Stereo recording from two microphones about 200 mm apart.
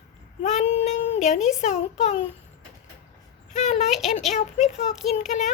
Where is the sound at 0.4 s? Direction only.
35° left (ahead or behind).